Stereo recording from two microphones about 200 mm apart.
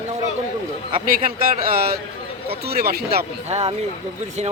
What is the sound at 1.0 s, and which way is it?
A man's voice, 45° right (ahead or behind).